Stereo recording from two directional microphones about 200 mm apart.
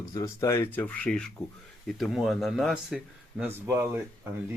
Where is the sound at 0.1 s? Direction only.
15° left (ahead or behind).